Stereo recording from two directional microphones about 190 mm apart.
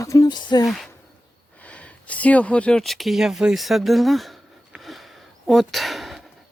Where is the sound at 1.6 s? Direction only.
5° left (ahead or behind).